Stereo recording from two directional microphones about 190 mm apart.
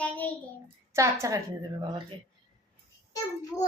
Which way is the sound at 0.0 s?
10° left (ahead or behind).